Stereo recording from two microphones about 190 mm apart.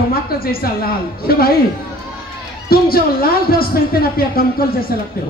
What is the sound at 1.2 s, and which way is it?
Speech, 50° left (ahead or behind).